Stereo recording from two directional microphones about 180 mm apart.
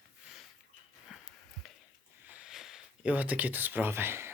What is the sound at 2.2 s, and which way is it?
Speech, 5° right (ahead or behind).